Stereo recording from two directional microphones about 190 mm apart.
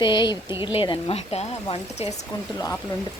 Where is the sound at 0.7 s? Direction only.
25° left (ahead or behind).